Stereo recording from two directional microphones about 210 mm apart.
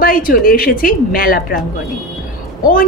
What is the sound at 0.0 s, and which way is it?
A woman's voice, 45° left (ahead or behind).